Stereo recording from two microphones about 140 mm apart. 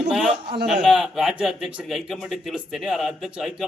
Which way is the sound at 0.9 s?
Centre (ahead or behind).